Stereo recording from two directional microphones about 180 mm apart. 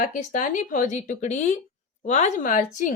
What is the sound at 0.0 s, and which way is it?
Speech, 45° left (ahead or behind).